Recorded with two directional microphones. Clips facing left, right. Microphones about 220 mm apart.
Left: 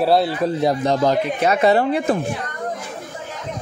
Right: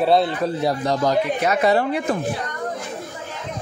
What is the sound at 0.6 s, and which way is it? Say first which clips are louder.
Speech: left 3 dB; 25° left (ahead or behind).